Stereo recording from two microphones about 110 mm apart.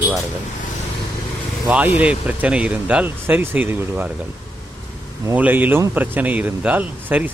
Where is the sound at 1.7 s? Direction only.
15° right (ahead or behind).